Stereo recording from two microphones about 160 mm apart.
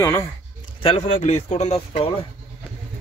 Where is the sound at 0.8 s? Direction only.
40° left (ahead or behind).